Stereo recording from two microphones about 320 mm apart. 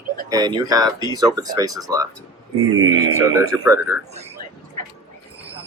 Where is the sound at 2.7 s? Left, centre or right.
Right.